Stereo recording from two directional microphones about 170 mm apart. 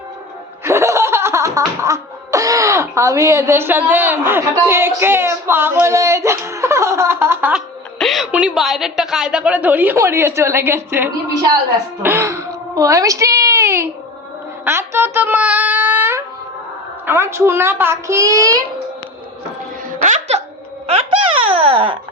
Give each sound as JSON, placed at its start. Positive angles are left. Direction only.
{"t": 0.6, "sound": "laughter", "side_deg": -15}
{"t": 7.5, "sound": "a woman's voice", "side_deg": 0}
{"t": 14.6, "sound": "child singing", "side_deg": -15}
{"t": 17.1, "sound": "a woman's voice", "side_deg": -15}
{"t": 20.0, "sound": "music", "side_deg": -45}